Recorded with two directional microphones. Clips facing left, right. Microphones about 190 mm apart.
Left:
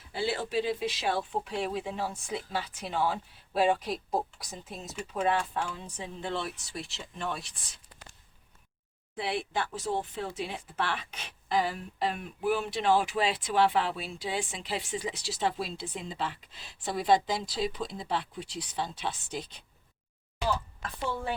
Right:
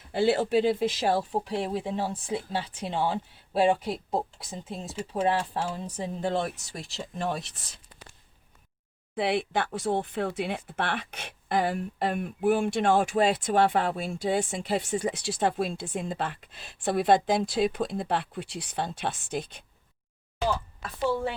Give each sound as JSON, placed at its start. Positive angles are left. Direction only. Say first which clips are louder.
{"t": 0.1, "sound": "speech", "louder": "right 8 dB", "side_deg": -50}
{"t": 9.1, "sound": "speech", "louder": "right 5 dB", "side_deg": -60}